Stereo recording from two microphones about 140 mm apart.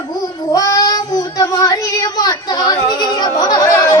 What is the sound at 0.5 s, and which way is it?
Child singing, 25° left (ahead or behind).